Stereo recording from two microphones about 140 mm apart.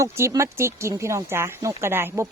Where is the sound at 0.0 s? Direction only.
20° right (ahead or behind).